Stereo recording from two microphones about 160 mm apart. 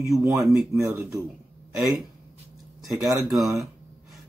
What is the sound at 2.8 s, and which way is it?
Speech, centre (ahead or behind).